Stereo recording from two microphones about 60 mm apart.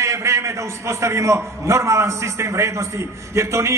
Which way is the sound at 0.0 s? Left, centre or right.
Right.